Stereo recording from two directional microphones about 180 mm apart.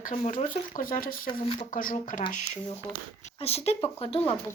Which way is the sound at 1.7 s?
50° left (ahead or behind).